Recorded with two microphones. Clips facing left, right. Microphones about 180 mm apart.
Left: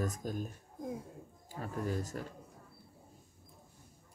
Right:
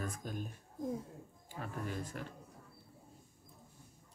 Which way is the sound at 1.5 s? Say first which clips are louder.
Left 5 dB; 40° left (ahead or behind).